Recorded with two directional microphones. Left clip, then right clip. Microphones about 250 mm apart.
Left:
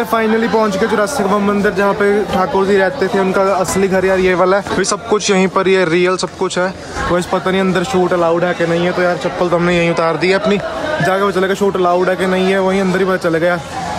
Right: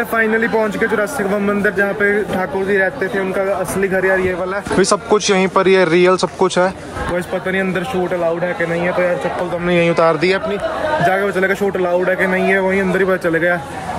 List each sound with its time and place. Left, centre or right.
0.1 s speech: centre
9.7 s speech: centre
11.1 s speech: centre